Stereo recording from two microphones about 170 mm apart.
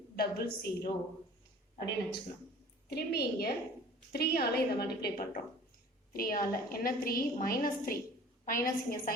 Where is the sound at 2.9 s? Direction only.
70° left (ahead or behind).